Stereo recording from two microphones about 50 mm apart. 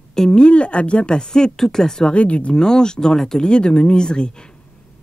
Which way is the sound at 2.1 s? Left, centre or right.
Left.